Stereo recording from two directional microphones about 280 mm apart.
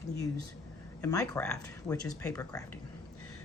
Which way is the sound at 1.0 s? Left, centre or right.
Centre.